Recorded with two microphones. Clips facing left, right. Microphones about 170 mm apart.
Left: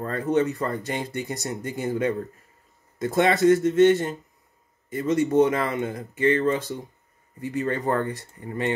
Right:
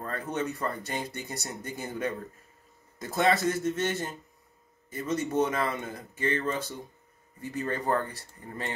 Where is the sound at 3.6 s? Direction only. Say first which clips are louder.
Left 12 dB; 25° left (ahead or behind).